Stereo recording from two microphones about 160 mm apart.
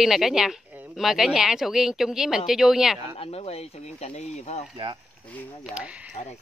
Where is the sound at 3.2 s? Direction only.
40° left (ahead or behind).